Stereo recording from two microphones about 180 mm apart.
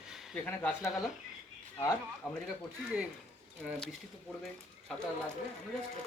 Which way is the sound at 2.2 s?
Centre (ahead or behind).